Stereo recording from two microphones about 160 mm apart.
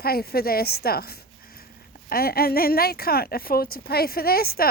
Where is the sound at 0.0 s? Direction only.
75° left (ahead or behind).